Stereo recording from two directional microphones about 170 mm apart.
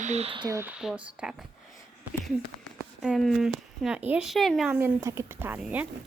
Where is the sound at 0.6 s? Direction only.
5° right (ahead or behind).